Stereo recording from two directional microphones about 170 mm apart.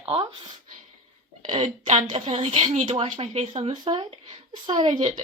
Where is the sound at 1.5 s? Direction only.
45° right (ahead or behind).